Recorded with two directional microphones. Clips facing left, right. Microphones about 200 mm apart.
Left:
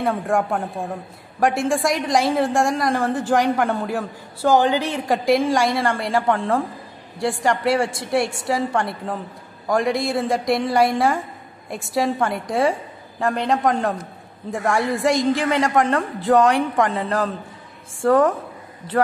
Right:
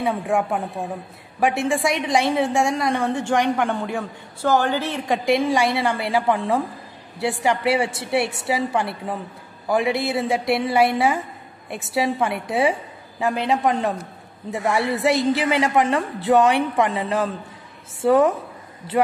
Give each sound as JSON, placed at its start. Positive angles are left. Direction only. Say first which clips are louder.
{"t": 0.0, "sound": "a woman's voice", "louder": "left 1 dB", "side_deg": 0}
{"t": 5.0, "sound": "a woman's voice", "louder": "left 1 dB", "side_deg": 0}